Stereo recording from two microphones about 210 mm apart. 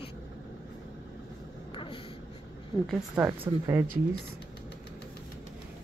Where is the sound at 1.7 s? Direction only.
25° left (ahead or behind).